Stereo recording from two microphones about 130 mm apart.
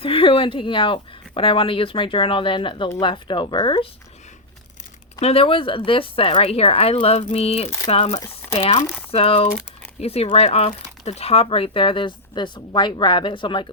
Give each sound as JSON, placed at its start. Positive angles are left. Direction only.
{"t": 0.0, "sound": "speech", "side_deg": 45}
{"t": 5.2, "sound": "speech", "side_deg": 45}
{"t": 8.2, "sound": "speech", "side_deg": 25}
{"t": 8.5, "sound": "speech", "side_deg": 50}